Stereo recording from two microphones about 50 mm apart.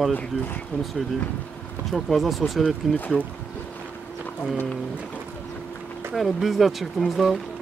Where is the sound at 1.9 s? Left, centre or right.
Centre.